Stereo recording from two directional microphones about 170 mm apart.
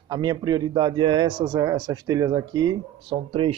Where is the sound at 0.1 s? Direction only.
25° right (ahead or behind).